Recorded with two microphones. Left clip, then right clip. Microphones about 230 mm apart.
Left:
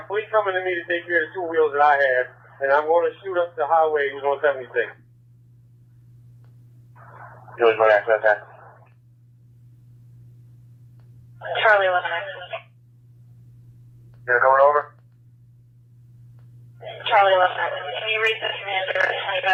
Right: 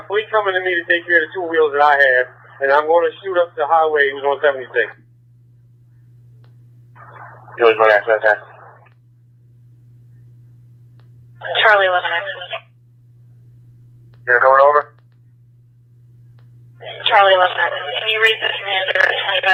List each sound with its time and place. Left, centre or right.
0.1 s speech: right
0.7 s speech: right
1.2 s speech: right
6.9 s a sound: right
7.8 s speech: right
8.3 s a sound: right
11.3 s speech: right
14.3 s speech: right
16.7 s speech: right
19.0 s radio: right